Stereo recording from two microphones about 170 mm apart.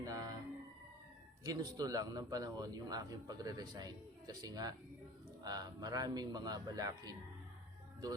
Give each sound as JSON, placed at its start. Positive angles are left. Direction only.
{"t": 0.0, "sound": "music", "side_deg": -20}
{"t": 1.5, "sound": "a man's voice", "side_deg": -20}